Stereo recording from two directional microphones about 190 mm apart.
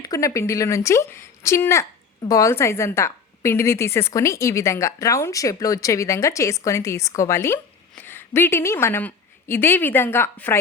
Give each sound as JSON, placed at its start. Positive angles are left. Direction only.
{"t": 0.0, "sound": "a woman's voice", "side_deg": 15}